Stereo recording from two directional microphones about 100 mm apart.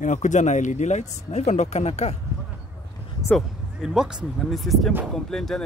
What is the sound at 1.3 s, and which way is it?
Speech, 90° left.